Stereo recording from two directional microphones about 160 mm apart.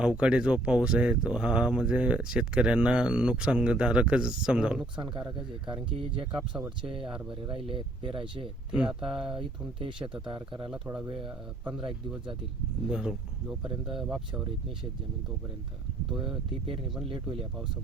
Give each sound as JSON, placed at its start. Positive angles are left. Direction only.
{"t": 0.0, "sound": "speech", "side_deg": -5}
{"t": 5.9, "sound": "speech", "side_deg": -35}
{"t": 6.3, "sound": "speech", "side_deg": -5}
{"t": 7.4, "sound": "speech", "side_deg": -30}
{"t": 8.7, "sound": "speech", "side_deg": -5}
{"t": 9.3, "sound": "speech", "side_deg": -30}
{"t": 10.7, "sound": "speech", "side_deg": -5}
{"t": 12.9, "sound": "speech", "side_deg": -5}
{"t": 16.1, "sound": "speech", "side_deg": -5}